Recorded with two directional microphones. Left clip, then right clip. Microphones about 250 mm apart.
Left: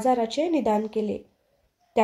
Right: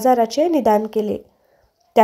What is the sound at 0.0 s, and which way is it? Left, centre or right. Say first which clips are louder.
Speech: right 8 dB; right.